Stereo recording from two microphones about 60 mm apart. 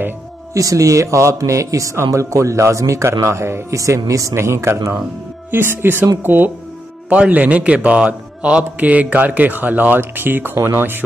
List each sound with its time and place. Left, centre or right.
0.6 s a man's voice: right
3.7 s a man's voice: right
4.4 s speech: right
7.1 s a man's voice: right